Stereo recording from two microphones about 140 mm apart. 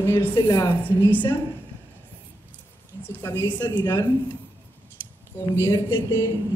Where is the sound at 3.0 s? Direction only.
15° left (ahead or behind).